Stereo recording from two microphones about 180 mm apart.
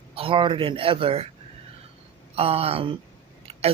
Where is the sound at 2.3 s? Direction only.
35° right (ahead or behind).